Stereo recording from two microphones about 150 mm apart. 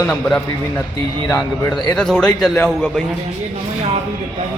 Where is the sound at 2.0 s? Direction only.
5° left (ahead or behind).